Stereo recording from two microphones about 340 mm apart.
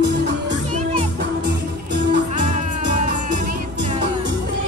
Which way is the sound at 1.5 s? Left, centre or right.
Right.